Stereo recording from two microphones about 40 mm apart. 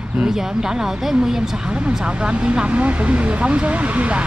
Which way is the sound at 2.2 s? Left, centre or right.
Right.